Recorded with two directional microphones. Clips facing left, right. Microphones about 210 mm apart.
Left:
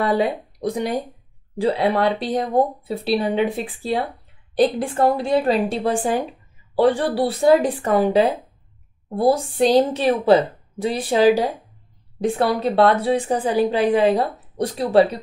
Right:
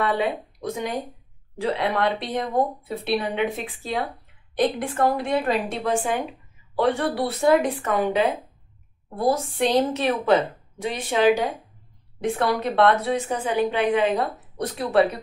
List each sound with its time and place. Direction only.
0.0 s a woman's voice: 35° left (ahead or behind)